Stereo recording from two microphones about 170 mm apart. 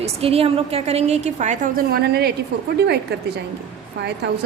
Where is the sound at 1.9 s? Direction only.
65° right (ahead or behind).